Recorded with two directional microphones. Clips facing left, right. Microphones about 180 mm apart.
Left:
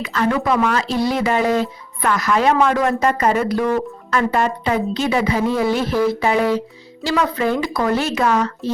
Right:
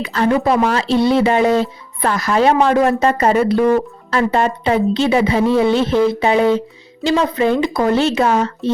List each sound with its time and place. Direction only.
0.0 s speech: 30° right (ahead or behind)